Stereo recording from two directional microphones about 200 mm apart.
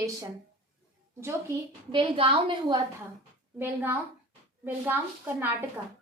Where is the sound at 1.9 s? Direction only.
25° right (ahead or behind).